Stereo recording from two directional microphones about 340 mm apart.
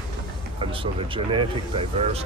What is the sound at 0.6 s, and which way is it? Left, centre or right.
Speech, centre.